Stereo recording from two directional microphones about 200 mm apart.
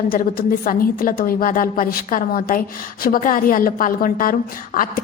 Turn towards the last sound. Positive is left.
turn(degrees=40)  # may be behind; listen again after turning